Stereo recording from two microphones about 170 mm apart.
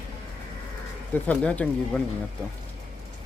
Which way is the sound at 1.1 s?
10° left (ahead or behind).